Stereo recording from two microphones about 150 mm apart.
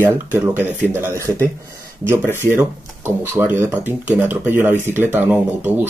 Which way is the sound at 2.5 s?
15° right (ahead or behind).